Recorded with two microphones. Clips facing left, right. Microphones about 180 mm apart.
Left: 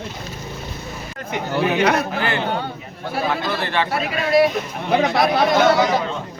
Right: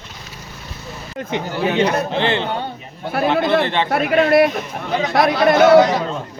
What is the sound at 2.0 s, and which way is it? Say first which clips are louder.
Speech: right 4 dB; 25° right (ahead or behind).